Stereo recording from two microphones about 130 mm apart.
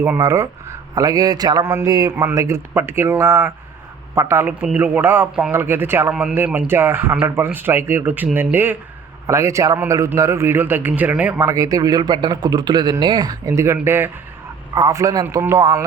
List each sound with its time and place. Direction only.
0.2 s speech: 25° right (ahead or behind)
1.6 s a man's voice: 20° right (ahead or behind)
1.9 s a man's voice: 30° right (ahead or behind)
13.6 s a man's voice: 20° right (ahead or behind)
14.8 s a man's voice: 30° right (ahead or behind)